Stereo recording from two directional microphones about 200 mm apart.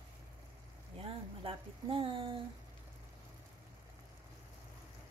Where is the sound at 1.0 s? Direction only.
25° right (ahead or behind).